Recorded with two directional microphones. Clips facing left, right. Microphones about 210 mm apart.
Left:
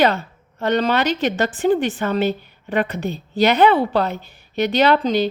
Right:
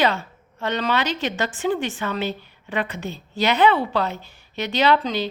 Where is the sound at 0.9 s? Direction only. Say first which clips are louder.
Left 4 dB; 60° left (ahead or behind).